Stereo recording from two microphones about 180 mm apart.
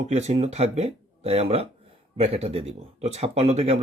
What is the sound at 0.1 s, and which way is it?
Speech, 40° right (ahead or behind).